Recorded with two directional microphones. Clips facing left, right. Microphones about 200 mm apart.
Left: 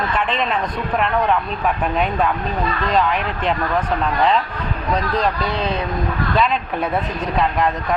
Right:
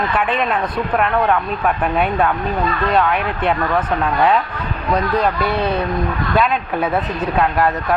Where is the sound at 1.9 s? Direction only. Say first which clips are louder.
Right 2 dB; 5° right (ahead or behind).